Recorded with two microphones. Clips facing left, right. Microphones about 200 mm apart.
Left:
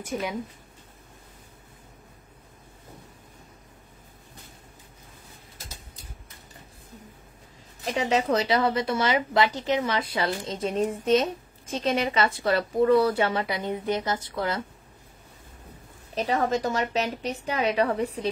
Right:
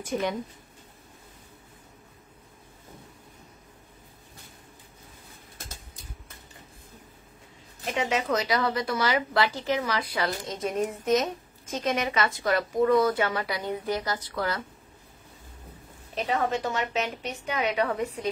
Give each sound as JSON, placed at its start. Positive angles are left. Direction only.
{"t": 0.0, "sound": "speech", "side_deg": 5}
{"t": 7.8, "sound": "a woman's voice", "side_deg": 35}
{"t": 16.2, "sound": "a woman's voice", "side_deg": 40}